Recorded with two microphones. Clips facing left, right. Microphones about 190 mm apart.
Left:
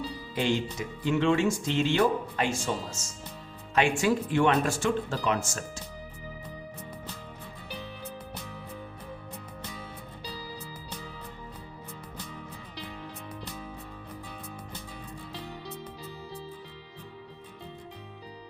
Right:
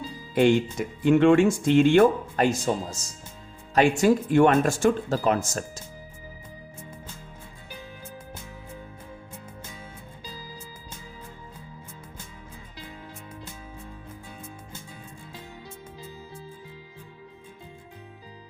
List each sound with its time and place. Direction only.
0.3 s speech: 50° right (ahead or behind)